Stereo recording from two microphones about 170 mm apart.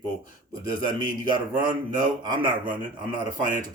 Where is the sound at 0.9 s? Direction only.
25° right (ahead or behind).